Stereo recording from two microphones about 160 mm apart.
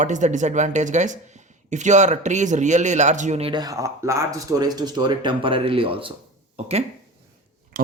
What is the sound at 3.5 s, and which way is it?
Speech, 25° right (ahead or behind).